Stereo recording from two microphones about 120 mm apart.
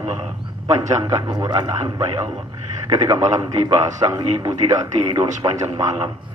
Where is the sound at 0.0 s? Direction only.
55° right (ahead or behind).